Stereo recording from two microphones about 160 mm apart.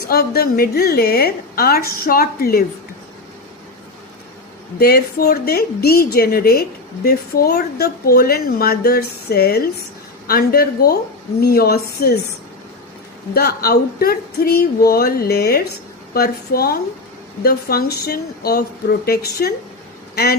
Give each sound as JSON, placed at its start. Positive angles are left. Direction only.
{"t": 0.1, "sound": "a woman's voice", "side_deg": 70}
{"t": 4.8, "sound": "a woman's voice", "side_deg": 75}
{"t": 13.3, "sound": "a woman's voice", "side_deg": 75}